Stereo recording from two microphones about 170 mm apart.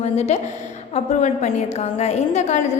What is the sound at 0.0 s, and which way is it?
A woman's voice, 40° left (ahead or behind).